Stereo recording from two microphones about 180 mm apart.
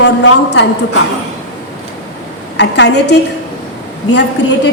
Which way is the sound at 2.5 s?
75° left (ahead or behind).